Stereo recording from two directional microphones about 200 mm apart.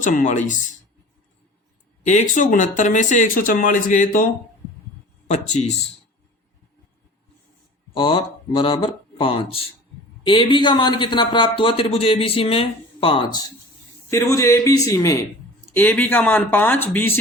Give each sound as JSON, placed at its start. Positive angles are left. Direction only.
{"t": 0.0, "sound": "speech", "side_deg": 40}
{"t": 2.0, "sound": "speech", "side_deg": 40}
{"t": 7.9, "sound": "a man's voice", "side_deg": 25}